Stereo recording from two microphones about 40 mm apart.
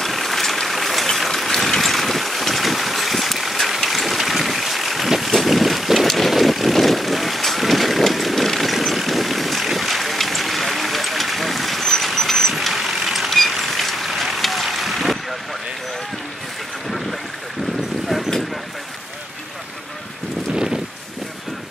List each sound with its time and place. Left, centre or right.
0.0 s vehicle: centre
13.3 s boat: centre
20.5 s a sound: centre